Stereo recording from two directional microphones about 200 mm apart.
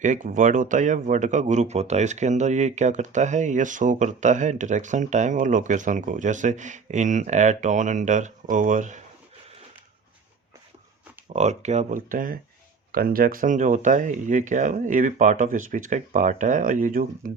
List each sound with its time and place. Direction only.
0.0 s speech: 40° right (ahead or behind)
11.3 s speech: 35° right (ahead or behind)